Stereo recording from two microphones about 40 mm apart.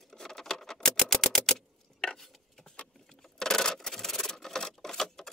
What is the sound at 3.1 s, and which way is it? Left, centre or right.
Rub, centre.